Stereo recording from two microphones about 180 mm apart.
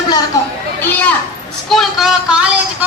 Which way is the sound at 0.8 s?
10° left (ahead or behind).